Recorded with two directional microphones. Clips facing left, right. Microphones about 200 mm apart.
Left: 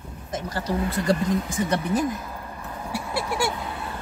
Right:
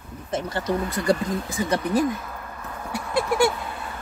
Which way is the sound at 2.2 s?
15° left (ahead or behind).